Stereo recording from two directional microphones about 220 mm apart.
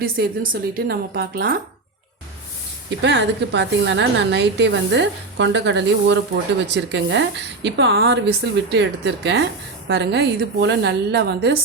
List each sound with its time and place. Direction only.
0.0 s a woman's voice: 40° right (ahead or behind)
3.0 s a woman's voice: 50° right (ahead or behind)